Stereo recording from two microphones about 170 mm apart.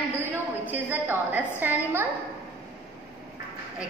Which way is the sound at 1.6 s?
10° right (ahead or behind).